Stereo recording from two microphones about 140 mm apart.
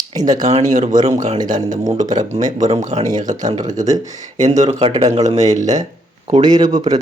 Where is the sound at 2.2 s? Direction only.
25° right (ahead or behind).